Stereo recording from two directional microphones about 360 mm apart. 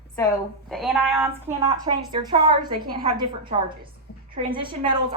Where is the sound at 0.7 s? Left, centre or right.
Centre.